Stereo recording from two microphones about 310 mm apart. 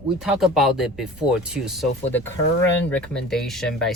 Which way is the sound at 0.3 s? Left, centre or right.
Centre.